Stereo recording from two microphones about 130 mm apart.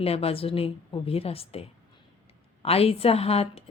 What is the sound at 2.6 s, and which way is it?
A woman's voice, 50° left (ahead or behind).